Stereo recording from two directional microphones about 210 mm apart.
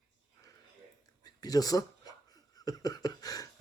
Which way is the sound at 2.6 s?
15° left (ahead or behind).